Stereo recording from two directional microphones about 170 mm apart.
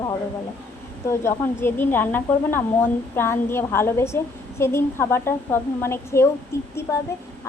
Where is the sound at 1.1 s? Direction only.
15° left (ahead or behind).